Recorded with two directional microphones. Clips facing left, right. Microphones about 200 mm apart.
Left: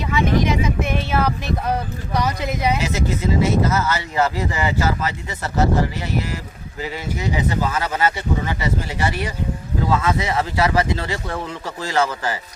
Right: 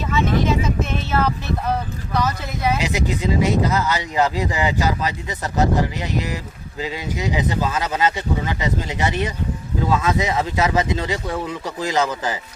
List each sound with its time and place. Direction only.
0.1 s vehicle: 15° left (ahead or behind)
2.1 s speech: 15° left (ahead or behind)
2.8 s speech: 15° right (ahead or behind)